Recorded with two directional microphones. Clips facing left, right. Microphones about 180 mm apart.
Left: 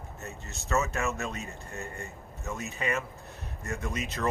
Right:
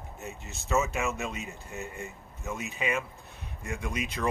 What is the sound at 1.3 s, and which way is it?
Speech, 15° right (ahead or behind).